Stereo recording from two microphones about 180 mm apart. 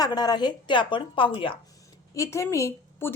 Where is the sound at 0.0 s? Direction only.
20° left (ahead or behind).